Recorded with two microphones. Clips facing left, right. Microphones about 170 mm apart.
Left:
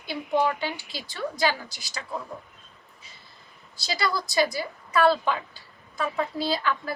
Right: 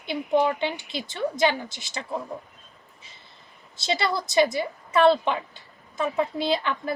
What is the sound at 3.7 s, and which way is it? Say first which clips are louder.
A woman's voice: right 2 dB; 25° right (ahead or behind).